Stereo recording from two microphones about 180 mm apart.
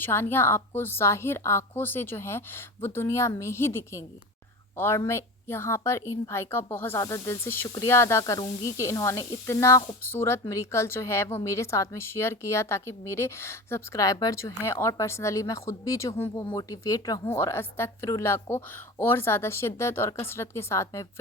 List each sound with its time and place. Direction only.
0.0 s a woman's voice: 10° left (ahead or behind)